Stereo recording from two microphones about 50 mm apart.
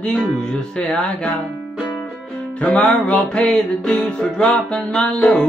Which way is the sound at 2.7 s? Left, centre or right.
Left.